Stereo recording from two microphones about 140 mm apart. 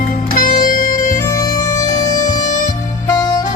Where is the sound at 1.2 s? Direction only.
25° left (ahead or behind).